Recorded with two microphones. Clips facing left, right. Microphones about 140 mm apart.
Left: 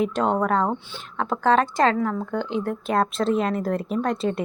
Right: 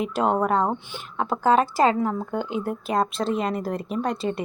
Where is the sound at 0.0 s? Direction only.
5° right (ahead or behind).